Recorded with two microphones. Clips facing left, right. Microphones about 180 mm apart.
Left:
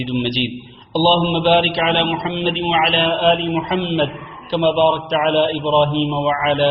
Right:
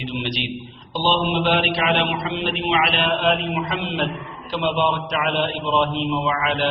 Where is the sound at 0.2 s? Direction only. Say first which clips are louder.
Left 6 dB; 35° left (ahead or behind).